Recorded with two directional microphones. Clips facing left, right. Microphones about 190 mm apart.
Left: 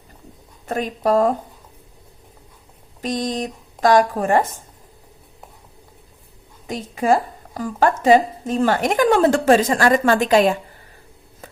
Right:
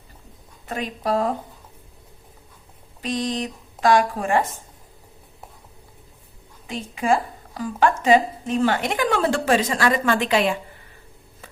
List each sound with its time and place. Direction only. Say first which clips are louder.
0.7 s a woman's voice: left 5 dB; 45° left (ahead or behind)
3.0 s a woman's voice: left 2 dB; 45° left (ahead or behind)
6.7 s a woman's voice: left 3 dB; 40° left (ahead or behind)